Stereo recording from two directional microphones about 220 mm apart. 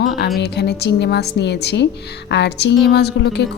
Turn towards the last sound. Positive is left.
turn(degrees=50)  # may be behind; listen again after turning